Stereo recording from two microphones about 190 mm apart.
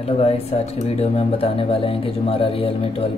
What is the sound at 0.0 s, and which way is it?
Speech, 30° left (ahead or behind).